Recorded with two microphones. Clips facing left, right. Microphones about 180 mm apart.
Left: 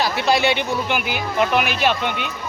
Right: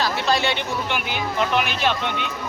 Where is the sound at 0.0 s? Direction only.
10° left (ahead or behind).